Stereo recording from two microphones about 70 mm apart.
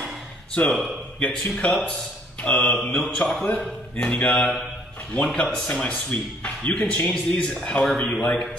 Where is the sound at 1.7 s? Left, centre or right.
Centre.